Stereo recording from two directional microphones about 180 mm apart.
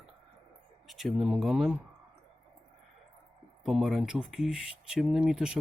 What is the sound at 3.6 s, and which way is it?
Speech, centre (ahead or behind).